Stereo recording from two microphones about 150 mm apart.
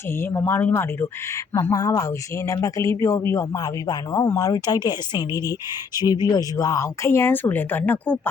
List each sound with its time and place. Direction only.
0.2 s a woman's voice: 15° left (ahead or behind)